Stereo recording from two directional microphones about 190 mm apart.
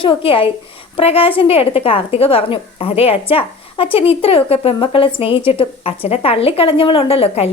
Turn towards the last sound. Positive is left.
turn(degrees=30)  # may be behind; listen again after turning